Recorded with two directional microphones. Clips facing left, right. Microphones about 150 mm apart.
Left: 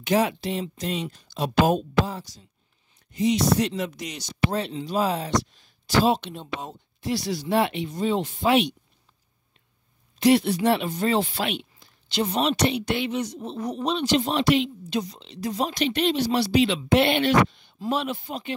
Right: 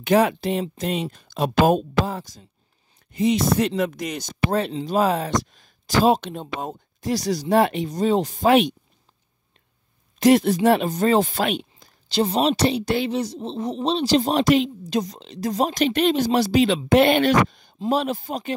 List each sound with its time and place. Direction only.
0.0 s speech: 55° right (ahead or behind)
10.1 s speech: 45° right (ahead or behind)